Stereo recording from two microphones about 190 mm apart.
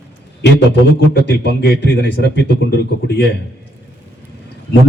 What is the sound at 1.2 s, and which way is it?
A man's voice, 65° left (ahead or behind).